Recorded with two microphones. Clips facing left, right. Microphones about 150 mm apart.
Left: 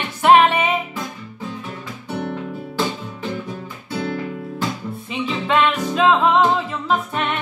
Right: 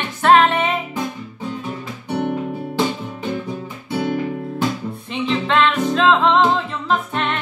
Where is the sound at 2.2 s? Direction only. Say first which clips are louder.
Right 5 dB; 15° right (ahead or behind).